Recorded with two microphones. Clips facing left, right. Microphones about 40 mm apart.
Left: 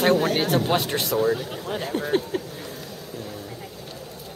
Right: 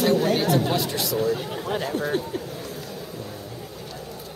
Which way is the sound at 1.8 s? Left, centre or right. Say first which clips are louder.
Left 2 dB; centre.